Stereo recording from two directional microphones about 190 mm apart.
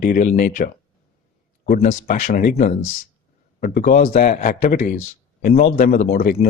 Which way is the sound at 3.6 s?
45° left (ahead or behind).